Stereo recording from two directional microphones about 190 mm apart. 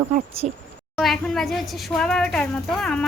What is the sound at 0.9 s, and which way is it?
A woman's voice, centre (ahead or behind).